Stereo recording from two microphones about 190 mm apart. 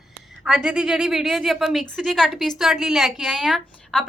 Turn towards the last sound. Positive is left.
turn(degrees=0)  # may be behind; listen again after turning